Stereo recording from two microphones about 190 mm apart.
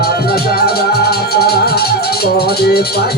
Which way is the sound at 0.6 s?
55° left (ahead or behind).